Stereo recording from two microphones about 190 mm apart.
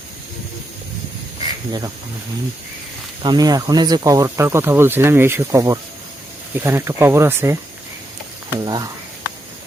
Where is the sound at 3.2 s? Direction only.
20° right (ahead or behind).